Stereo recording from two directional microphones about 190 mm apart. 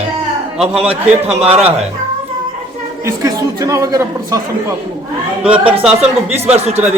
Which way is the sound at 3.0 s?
15° right (ahead or behind).